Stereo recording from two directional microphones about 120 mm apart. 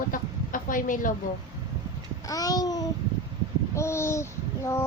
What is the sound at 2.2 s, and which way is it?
Child singing, 30° left (ahead or behind).